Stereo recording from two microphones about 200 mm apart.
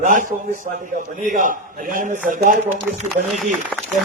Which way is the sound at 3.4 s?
5° right (ahead or behind).